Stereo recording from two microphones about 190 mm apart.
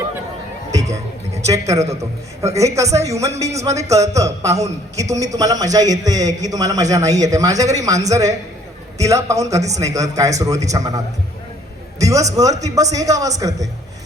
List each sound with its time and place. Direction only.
0.7 s music: 15° right (ahead or behind)
1.4 s a woman's voice: 15° right (ahead or behind)